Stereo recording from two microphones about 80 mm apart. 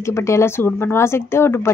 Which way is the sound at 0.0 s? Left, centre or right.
Left.